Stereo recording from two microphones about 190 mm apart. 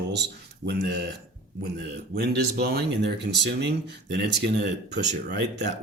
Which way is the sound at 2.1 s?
60° right (ahead or behind).